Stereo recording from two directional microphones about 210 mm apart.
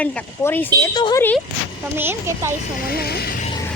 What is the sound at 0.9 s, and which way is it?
Speech, 20° left (ahead or behind).